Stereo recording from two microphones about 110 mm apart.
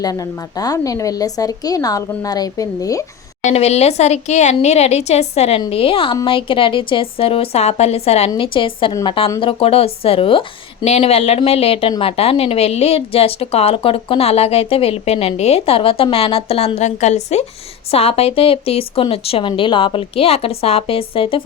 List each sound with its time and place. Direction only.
0.0 s speech: 35° left (ahead or behind)
3.4 s speech: 75° left (ahead or behind)
5.5 s a woman's voice: 55° left (ahead or behind)
8.4 s a woman's voice: 50° left (ahead or behind)
10.8 s a woman's voice: 75° left (ahead or behind); by 17.4 s 90° left
17.9 s a woman's voice: 65° left (ahead or behind)